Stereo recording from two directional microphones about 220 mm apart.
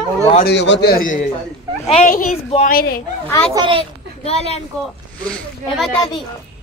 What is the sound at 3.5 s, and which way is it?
Speech, 20° right (ahead or behind).